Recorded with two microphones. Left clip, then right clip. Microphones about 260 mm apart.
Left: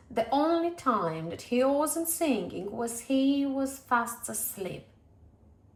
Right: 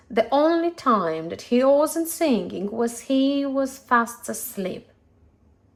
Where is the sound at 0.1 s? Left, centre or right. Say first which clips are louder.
Right 7 dB; right.